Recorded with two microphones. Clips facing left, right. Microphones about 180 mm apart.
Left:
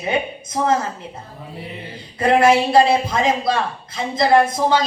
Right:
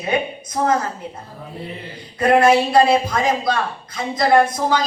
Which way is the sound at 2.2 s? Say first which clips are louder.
Even; 25° left (ahead or behind).